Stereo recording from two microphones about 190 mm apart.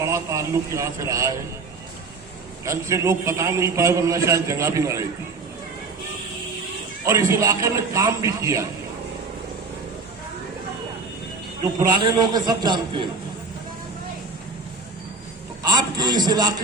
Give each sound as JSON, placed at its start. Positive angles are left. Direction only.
{"t": 0.0, "sound": "a man's voice", "side_deg": -15}
{"t": 2.6, "sound": "a man's voice", "side_deg": -15}
{"t": 7.0, "sound": "a man's voice", "side_deg": -15}
{"t": 12.1, "sound": "a man's voice", "side_deg": -20}
{"t": 15.6, "sound": "music", "side_deg": -20}